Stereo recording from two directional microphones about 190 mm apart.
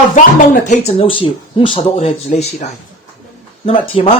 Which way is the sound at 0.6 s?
35° left (ahead or behind).